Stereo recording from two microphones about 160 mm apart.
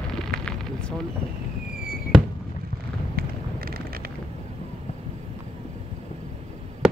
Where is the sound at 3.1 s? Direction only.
70° right (ahead or behind).